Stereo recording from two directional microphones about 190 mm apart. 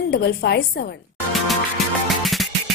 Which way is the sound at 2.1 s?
Centre (ahead or behind).